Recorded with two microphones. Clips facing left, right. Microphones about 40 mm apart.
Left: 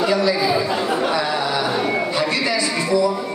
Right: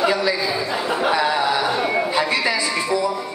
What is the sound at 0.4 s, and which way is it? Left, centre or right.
Chatter, centre.